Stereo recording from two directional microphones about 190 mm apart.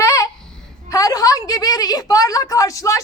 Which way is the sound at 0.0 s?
15° left (ahead or behind).